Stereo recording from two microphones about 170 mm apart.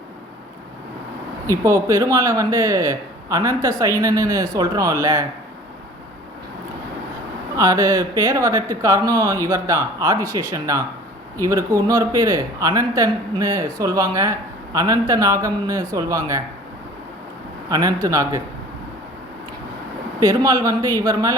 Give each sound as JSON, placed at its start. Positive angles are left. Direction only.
{"t": 1.5, "sound": "speech", "side_deg": -20}
{"t": 7.5, "sound": "speech", "side_deg": -20}
{"t": 17.7, "sound": "speech", "side_deg": -20}
{"t": 20.1, "sound": "speech", "side_deg": -20}